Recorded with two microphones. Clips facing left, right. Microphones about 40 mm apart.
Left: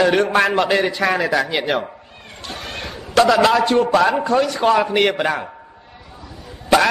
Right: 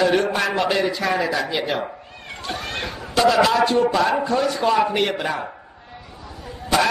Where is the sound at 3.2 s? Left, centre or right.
Left.